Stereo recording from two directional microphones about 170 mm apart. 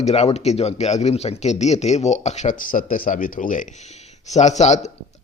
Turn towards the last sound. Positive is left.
turn(degrees=45)  # may be behind; listen again after turning